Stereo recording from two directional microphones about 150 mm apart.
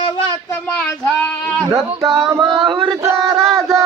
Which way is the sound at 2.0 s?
35° right (ahead or behind).